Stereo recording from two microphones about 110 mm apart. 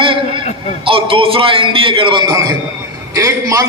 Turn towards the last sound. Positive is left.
turn(degrees=-30)  # may be behind; listen again after turning